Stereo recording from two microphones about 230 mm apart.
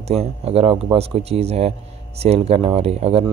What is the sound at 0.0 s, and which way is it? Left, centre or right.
Speech, right.